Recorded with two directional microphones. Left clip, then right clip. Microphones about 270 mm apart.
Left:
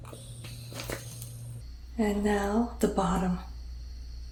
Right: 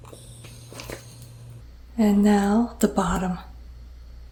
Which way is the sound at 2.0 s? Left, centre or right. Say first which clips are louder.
Right 7 dB; centre.